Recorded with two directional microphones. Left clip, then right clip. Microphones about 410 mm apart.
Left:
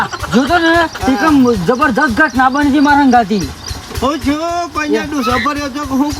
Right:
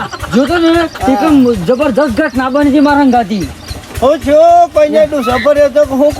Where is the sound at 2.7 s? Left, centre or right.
Left.